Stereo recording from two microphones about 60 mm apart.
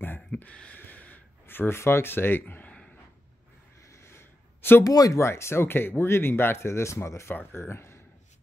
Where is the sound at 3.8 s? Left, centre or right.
Left.